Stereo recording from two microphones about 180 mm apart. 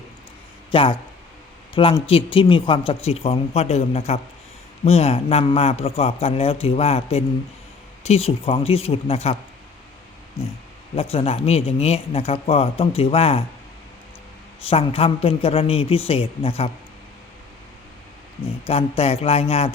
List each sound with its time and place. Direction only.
0.7 s speech: 30° left (ahead or behind)
10.9 s speech: 35° left (ahead or behind)
14.6 s speech: 30° left (ahead or behind)
18.6 s speech: 35° left (ahead or behind)